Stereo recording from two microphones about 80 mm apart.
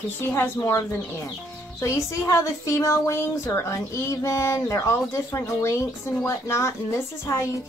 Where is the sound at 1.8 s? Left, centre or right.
Left.